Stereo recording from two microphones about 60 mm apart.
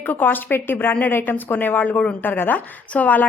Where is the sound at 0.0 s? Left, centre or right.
Left.